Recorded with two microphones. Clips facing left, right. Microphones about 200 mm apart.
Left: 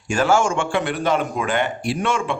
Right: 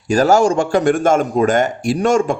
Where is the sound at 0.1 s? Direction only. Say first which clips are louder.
Right 6 dB; 40° right (ahead or behind).